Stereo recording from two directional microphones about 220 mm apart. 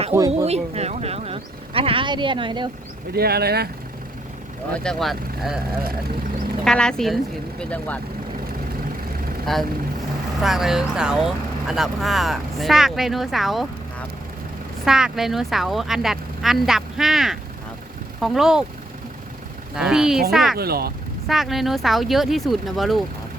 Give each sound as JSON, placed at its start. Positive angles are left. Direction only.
{"t": 0.1, "sound": "speech", "side_deg": -10}
{"t": 0.4, "sound": "speech", "side_deg": -30}
{"t": 3.2, "sound": "speech", "side_deg": -45}
{"t": 4.7, "sound": "speech", "side_deg": 5}
{"t": 6.7, "sound": "speech", "side_deg": 5}
{"t": 9.5, "sound": "speech", "side_deg": 0}
{"t": 14.8, "sound": "speech", "side_deg": 0}
{"t": 19.7, "sound": "speech", "side_deg": -5}
{"t": 20.6, "sound": "speech", "side_deg": -45}
{"t": 21.2, "sound": "speech", "side_deg": 0}